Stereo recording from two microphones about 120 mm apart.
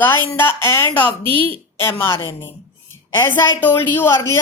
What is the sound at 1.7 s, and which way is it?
A woman's voice, 20° left (ahead or behind).